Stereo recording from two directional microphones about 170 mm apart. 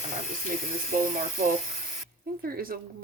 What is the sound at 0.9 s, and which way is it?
Speech, 55° right (ahead or behind).